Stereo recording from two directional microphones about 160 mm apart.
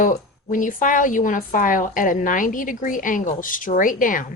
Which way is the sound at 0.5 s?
55° left (ahead or behind).